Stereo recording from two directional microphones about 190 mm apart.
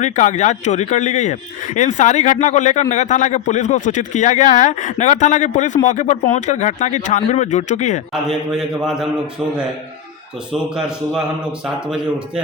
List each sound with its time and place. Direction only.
0.0 s speech: 40° left (ahead or behind)
8.1 s a man's voice: centre (ahead or behind)
10.5 s a man's voice: 5° right (ahead or behind)